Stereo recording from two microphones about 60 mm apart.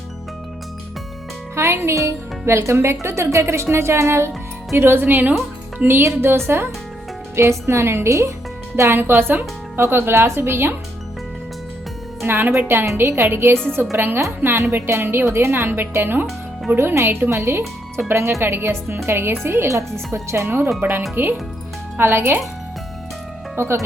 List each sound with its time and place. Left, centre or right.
1.5 s a woman's voice: right
6.1 s a woman's voice: right
7.3 s a woman's voice: right
12.2 s a woman's voice: right
13.0 s a woman's voice: right
13.2 s a woman's voice: right
14.5 s a woman's voice: right
14.8 s a woman's voice: right
17.1 s a woman's voice: right
17.3 s a woman's voice: right
23.6 s a woman's voice: right